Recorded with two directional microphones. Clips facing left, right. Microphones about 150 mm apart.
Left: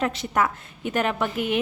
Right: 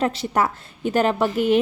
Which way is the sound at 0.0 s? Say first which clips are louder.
Right 3 dB; 35° right (ahead or behind).